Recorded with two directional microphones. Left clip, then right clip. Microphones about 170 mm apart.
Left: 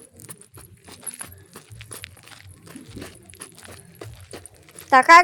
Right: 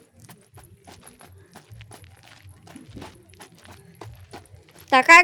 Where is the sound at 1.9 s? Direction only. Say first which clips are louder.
Left 9 dB; 5° left (ahead or behind).